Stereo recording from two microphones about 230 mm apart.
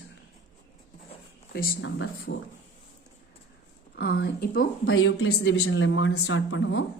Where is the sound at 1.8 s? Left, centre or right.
Left.